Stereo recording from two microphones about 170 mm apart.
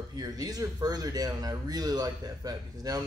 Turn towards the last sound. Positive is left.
turn(degrees=-20)  # may be behind; listen again after turning